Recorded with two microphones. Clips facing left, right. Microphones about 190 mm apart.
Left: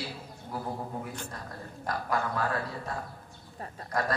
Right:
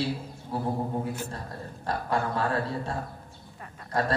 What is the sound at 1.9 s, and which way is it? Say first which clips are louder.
A man's voice: right 3 dB; 30° right (ahead or behind).